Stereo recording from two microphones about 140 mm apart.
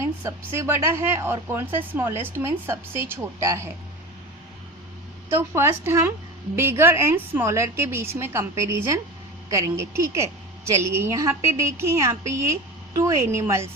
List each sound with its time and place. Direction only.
0.0 s a woman's voice: 20° right (ahead or behind)
5.5 s a woman's voice: 20° right (ahead or behind)